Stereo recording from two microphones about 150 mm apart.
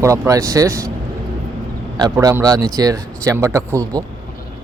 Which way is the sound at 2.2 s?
25° right (ahead or behind).